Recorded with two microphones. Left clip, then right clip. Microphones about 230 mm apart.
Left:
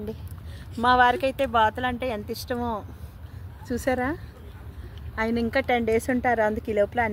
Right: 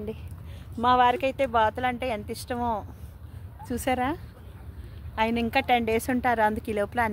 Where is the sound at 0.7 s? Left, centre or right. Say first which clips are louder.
Left 2 dB; centre.